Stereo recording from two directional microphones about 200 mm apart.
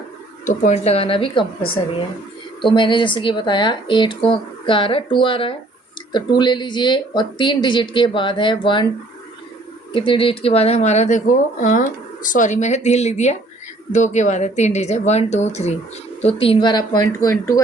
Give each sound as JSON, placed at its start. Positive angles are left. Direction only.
{"t": 0.4, "sound": "speech", "side_deg": 35}
{"t": 9.9, "sound": "speech", "side_deg": 25}